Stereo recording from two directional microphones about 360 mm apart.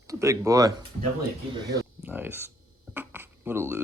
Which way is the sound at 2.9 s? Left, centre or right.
Centre.